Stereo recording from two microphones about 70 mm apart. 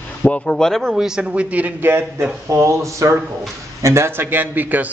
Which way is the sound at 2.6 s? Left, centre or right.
Right.